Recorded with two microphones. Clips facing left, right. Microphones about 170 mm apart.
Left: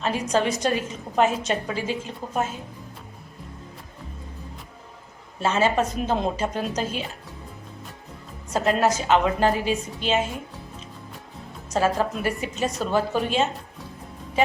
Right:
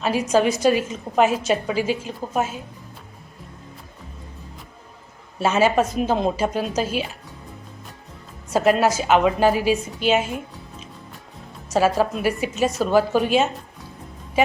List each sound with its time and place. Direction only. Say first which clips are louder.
0.0 s a woman's voice: right 4 dB; 10° right (ahead or behind)
5.4 s a woman's voice: right 3 dB; 10° right (ahead or behind)
8.5 s a woman's voice: right 3 dB; 10° right (ahead or behind)
11.7 s a woman's voice: right 4 dB; 10° right (ahead or behind)